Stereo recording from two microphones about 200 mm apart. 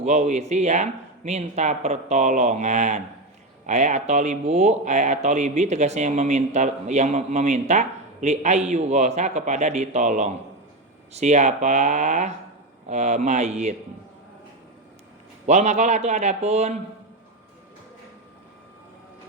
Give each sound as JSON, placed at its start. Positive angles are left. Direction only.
{"t": 0.0, "sound": "speech", "side_deg": -35}
{"t": 15.4, "sound": "speech", "side_deg": -35}